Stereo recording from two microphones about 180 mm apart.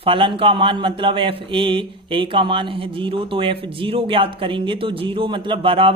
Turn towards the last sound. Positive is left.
turn(degrees=-30)  # may be behind; listen again after turning